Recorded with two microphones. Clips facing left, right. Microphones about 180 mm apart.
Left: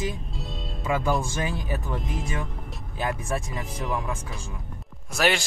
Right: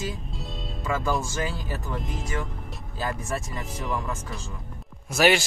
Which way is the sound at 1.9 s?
Centre (ahead or behind).